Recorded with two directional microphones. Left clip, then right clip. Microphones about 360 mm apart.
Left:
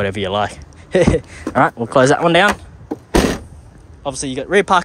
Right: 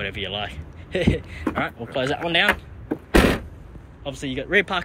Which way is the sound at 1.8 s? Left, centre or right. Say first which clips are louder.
Left 12 dB; left.